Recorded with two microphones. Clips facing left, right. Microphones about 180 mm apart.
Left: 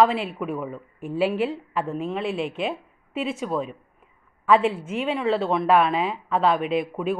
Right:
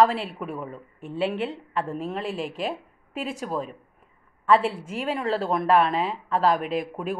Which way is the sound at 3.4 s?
Centre (ahead or behind).